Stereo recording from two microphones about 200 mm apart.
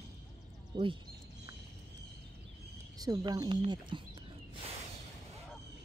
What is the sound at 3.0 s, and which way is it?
Speech, 20° right (ahead or behind).